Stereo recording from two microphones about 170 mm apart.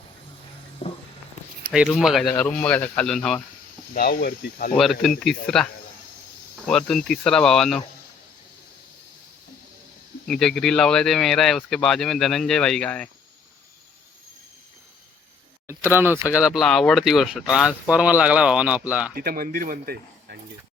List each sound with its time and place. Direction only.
0.8 s music: 35° left (ahead or behind)
1.7 s speech: centre (ahead or behind)
3.9 s speech: 60° left (ahead or behind)
4.7 s speech: centre (ahead or behind)
6.7 s speech: 5° left (ahead or behind)
10.2 s speech: 5° left (ahead or behind)
15.6 s speech: 10° right (ahead or behind)
16.4 s speech: centre (ahead or behind)
19.1 s speech: 60° right (ahead or behind)